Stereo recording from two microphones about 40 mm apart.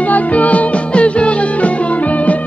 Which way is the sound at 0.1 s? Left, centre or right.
Left.